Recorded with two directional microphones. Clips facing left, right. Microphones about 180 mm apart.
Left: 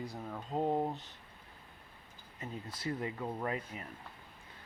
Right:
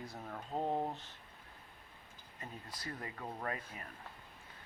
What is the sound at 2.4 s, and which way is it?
Speech, 25° left (ahead or behind).